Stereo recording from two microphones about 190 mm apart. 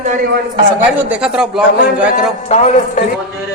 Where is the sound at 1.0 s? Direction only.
5° right (ahead or behind).